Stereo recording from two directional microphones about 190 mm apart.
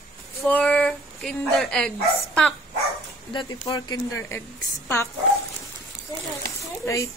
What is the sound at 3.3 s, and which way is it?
Speech, 25° left (ahead or behind).